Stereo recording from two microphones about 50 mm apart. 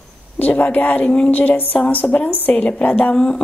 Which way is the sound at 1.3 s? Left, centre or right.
Left.